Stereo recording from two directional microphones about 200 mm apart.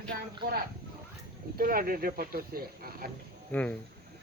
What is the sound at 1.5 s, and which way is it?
Speech, 45° right (ahead or behind).